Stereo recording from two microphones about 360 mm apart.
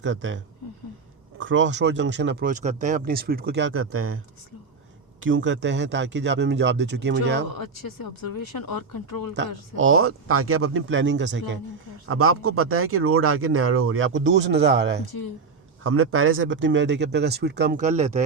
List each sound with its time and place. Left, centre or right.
0.0 s speech: right
5.2 s speech: right
7.5 s speech: left
9.7 s speech: right
15.0 s speech: left
15.8 s speech: right; by 18.2 s centre